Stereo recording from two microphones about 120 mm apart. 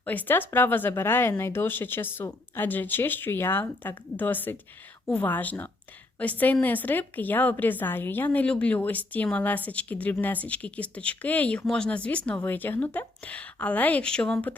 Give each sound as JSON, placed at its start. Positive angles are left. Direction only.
{"t": 0.0, "sound": "a woman's voice", "side_deg": 15}